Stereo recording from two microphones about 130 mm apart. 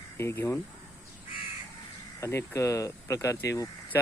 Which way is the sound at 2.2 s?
20° left (ahead or behind).